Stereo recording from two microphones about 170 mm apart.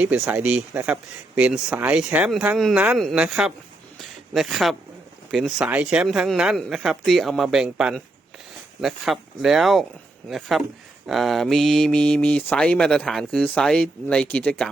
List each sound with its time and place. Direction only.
0.0 s speech: 10° right (ahead or behind); by 14.7 s 5° left (ahead or behind)